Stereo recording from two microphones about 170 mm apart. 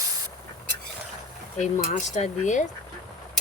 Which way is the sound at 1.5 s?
45° left (ahead or behind).